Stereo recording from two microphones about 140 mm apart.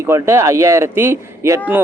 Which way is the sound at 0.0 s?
20° right (ahead or behind).